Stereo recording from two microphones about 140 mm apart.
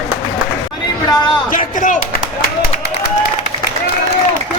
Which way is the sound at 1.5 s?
65° left (ahead or behind).